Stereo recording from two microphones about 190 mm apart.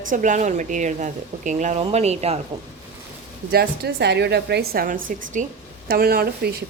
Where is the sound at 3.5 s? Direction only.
60° right (ahead or behind).